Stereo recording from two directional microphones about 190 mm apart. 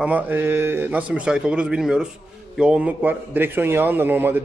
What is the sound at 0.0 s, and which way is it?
A man's voice, 10° right (ahead or behind).